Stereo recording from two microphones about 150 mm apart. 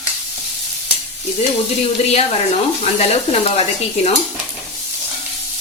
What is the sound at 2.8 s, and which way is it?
Speech, 45° left (ahead or behind).